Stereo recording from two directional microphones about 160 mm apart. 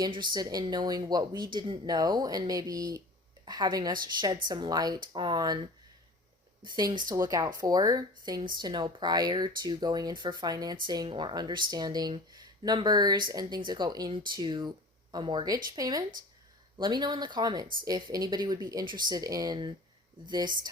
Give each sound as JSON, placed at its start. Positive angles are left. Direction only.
{"t": 0.0, "sound": "speech", "side_deg": -30}
{"t": 6.7, "sound": "speech", "side_deg": -25}